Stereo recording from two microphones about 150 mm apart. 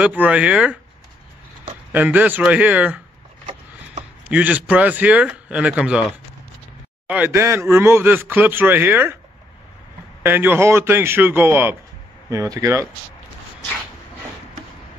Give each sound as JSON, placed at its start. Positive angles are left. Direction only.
{"t": 0.0, "sound": "speech", "side_deg": -10}
{"t": 1.9, "sound": "speech", "side_deg": -10}
{"t": 4.3, "sound": "speech", "side_deg": -10}
{"t": 7.1, "sound": "speech", "side_deg": -15}
{"t": 10.2, "sound": "speech", "side_deg": -15}